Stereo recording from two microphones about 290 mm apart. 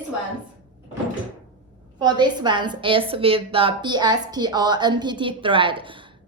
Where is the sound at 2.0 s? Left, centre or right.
Centre.